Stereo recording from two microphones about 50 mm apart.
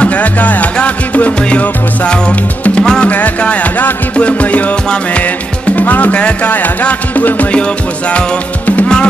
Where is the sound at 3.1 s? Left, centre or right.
Left.